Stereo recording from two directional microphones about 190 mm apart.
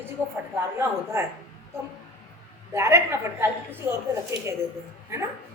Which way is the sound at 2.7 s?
15° right (ahead or behind).